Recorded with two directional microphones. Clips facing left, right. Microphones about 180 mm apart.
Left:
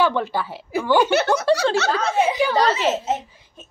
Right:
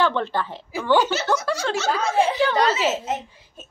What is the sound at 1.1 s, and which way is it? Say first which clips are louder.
Speech: left 5 dB; 60° left (ahead or behind).